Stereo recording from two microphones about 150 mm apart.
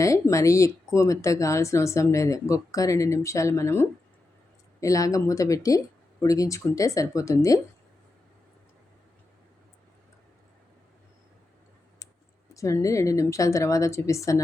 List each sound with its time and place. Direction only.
0.0 s speech: 20° left (ahead or behind)
12.5 s speech: 20° left (ahead or behind)